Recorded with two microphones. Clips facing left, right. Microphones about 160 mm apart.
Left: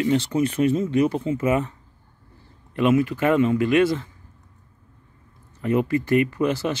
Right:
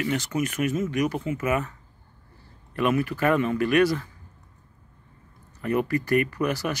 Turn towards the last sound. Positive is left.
turn(degrees=25)  # may be behind; listen again after turning